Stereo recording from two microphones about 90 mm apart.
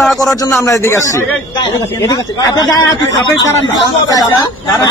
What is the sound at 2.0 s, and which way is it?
A man's voice, 45° left (ahead or behind).